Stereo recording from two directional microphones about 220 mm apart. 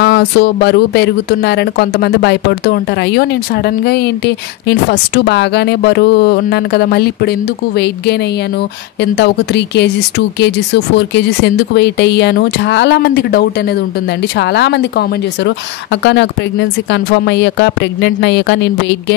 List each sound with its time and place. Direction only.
0.0 s speech: 50° left (ahead or behind)